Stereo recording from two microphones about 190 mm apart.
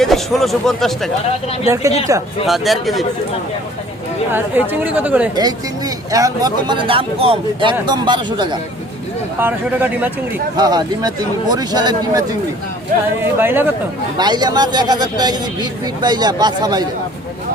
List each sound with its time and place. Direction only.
0.0 s speech: centre (ahead or behind)
1.6 s speech: 15° right (ahead or behind)
2.5 s speech: centre (ahead or behind)
4.3 s speech: 10° right (ahead or behind)
5.3 s speech: 20° right (ahead or behind)
9.4 s speech: 10° right (ahead or behind)
10.6 s speech: 20° right (ahead or behind)
12.9 s speech: 45° right (ahead or behind)
13.4 s speech: 10° right (ahead or behind)
14.2 s speech: 20° right (ahead or behind)